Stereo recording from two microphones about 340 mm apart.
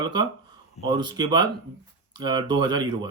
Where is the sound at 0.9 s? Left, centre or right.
Centre.